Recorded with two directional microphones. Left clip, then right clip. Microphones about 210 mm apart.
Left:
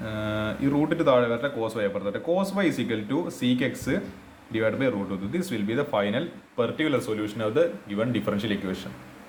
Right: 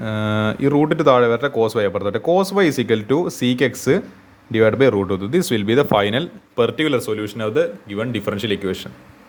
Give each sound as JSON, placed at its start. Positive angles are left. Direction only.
{"t": 0.0, "sound": "a man's voice", "side_deg": -50}